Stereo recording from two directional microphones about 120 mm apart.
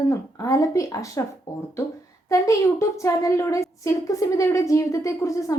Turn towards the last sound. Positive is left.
turn(degrees=25)  # may be behind; listen again after turning